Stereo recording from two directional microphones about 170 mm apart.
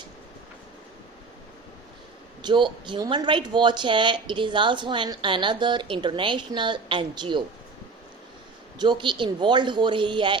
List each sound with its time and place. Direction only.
2.4 s speech: 25° right (ahead or behind)
8.8 s speech: 30° right (ahead or behind)